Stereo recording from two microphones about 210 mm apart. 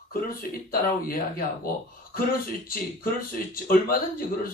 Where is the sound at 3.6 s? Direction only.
45° left (ahead or behind).